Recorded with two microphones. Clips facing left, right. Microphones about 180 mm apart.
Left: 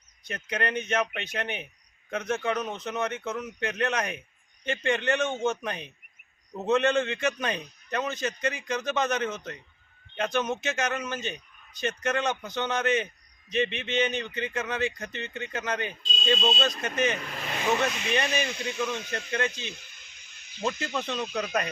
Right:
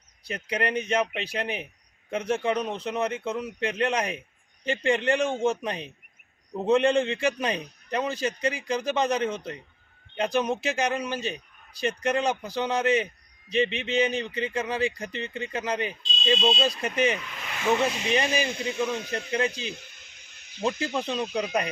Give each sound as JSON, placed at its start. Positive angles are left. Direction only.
{"t": 0.4, "sound": "a man's voice", "side_deg": -35}
{"t": 16.4, "sound": "speech", "side_deg": 0}
{"t": 16.6, "sound": "a man's voice", "side_deg": -30}
{"t": 17.2, "sound": "vehicle", "side_deg": 40}
{"t": 17.7, "sound": "a man's voice", "side_deg": -30}
{"t": 20.6, "sound": "speech", "side_deg": -15}
{"t": 21.0, "sound": "a man's voice", "side_deg": -30}
{"t": 21.3, "sound": "speech", "side_deg": -10}